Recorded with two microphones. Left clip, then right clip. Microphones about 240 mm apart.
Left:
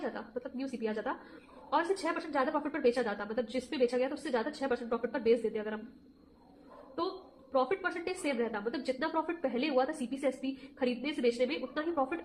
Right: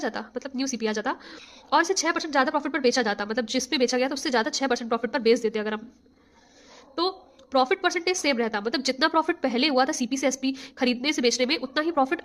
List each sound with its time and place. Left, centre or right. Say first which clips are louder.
0.0 s a woman's voice: right 8 dB; right
7.5 s a woman's voice: right 9 dB; right